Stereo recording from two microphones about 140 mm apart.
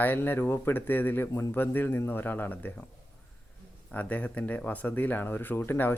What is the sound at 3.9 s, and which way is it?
Speech, 10° left (ahead or behind).